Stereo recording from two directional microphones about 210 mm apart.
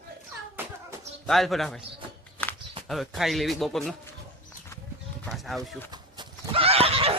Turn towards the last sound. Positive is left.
turn(degrees=-25)  # may be behind; listen again after turning